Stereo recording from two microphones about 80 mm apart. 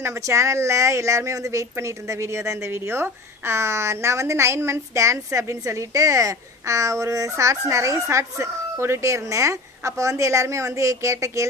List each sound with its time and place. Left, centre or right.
0.0 s a woman's voice: right